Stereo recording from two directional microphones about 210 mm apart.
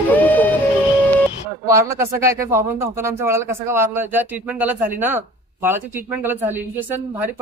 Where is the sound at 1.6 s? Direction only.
15° right (ahead or behind).